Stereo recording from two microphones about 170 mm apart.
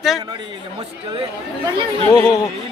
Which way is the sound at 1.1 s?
30° right (ahead or behind).